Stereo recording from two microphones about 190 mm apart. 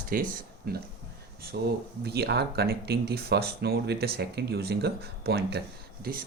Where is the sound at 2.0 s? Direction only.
55° right (ahead or behind).